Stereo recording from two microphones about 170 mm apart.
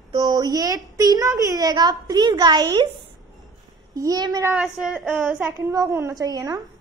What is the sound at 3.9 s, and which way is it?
Child singing, 20° right (ahead or behind).